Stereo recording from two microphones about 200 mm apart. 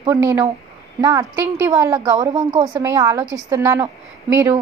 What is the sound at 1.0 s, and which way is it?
A woman's voice, 15° right (ahead or behind).